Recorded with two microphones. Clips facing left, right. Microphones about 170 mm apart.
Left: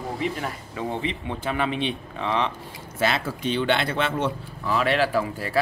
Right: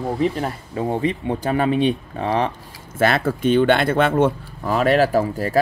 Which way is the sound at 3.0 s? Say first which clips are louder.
Right 7 dB; 55° right (ahead or behind).